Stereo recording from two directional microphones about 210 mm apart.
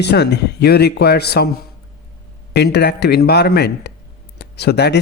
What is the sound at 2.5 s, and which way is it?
Speech, 50° left (ahead or behind).